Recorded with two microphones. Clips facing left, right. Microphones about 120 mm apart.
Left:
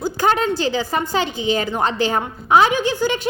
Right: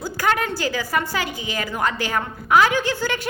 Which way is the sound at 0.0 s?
25° left (ahead or behind).